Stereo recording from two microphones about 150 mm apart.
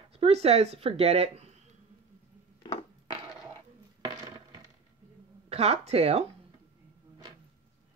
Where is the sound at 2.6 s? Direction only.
40° left (ahead or behind).